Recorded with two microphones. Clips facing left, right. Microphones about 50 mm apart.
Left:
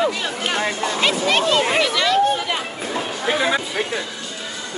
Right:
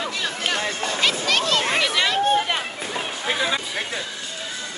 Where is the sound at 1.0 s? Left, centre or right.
Left.